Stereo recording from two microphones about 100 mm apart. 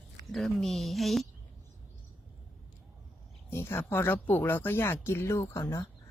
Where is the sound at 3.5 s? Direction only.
25° left (ahead or behind).